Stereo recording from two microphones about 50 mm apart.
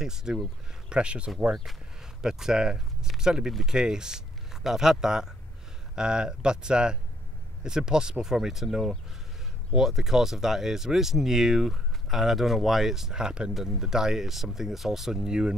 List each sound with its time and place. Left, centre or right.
0.0 s speech: centre
1.5 s speech: centre